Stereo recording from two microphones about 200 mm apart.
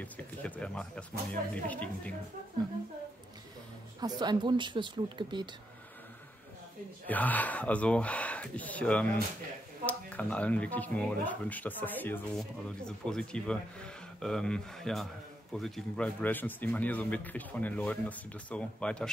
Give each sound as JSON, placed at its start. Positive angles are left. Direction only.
{"t": 0.0, "sound": "speech", "side_deg": 5}
{"t": 4.0, "sound": "speech", "side_deg": -20}
{"t": 7.1, "sound": "speech", "side_deg": 10}